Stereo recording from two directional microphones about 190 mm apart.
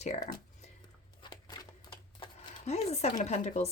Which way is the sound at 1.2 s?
20° left (ahead or behind).